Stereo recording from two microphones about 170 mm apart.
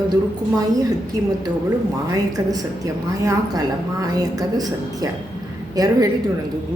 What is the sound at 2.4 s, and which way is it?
A woman's voice, 20° right (ahead or behind).